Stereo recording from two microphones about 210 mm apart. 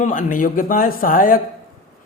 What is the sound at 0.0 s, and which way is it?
A man's voice, 40° left (ahead or behind).